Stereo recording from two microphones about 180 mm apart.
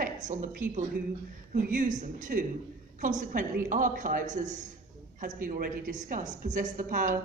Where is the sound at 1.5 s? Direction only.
45° right (ahead or behind).